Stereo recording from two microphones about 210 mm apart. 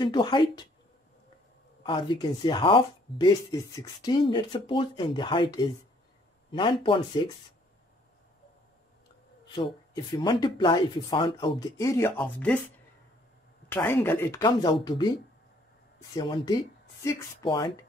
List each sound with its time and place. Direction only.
0.0 s speech: 20° left (ahead or behind)
1.8 s speech: 25° left (ahead or behind)
9.5 s speech: 20° left (ahead or behind)
13.7 s speech: 10° left (ahead or behind)
16.2 s speech: 20° left (ahead or behind)